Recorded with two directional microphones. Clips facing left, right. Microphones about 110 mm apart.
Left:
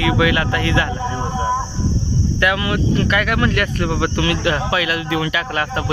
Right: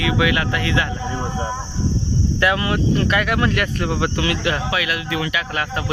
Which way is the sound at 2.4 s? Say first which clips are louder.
Even; 30° right (ahead or behind).